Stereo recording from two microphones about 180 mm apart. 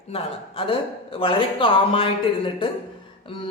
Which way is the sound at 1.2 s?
30° left (ahead or behind).